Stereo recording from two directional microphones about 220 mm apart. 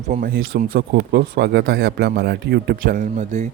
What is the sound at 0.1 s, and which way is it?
Speech, 40° right (ahead or behind).